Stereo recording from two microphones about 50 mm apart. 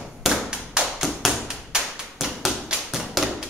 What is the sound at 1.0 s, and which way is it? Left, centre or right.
Tap, centre.